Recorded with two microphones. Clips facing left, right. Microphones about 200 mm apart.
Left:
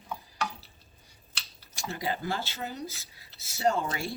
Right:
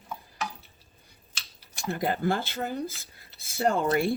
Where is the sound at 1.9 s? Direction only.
55° right (ahead or behind).